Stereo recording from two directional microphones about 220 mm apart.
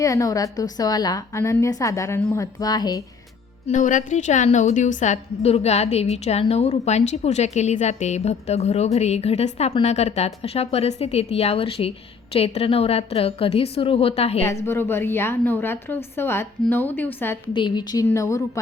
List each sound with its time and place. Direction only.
0.0 s a woman's voice: 15° left (ahead or behind)
3.7 s a woman's voice: 35° left (ahead or behind)
14.4 s a woman's voice: 10° left (ahead or behind)
17.5 s a woman's voice: 20° left (ahead or behind)